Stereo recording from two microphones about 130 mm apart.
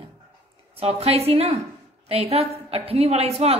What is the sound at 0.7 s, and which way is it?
A woman's voice, 50° right (ahead or behind).